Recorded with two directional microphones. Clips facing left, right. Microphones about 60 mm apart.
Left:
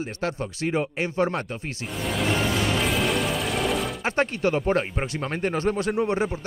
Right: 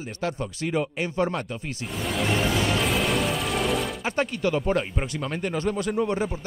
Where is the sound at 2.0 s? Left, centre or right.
Centre.